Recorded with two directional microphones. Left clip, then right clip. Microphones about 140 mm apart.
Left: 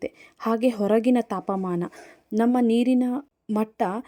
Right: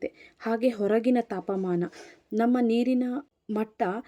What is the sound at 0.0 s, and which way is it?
Speech, 25° left (ahead or behind).